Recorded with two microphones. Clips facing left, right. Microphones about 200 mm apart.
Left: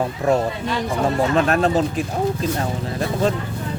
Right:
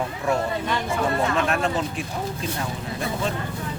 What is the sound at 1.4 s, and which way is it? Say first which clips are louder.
Speech: left 6 dB; 35° left (ahead or behind).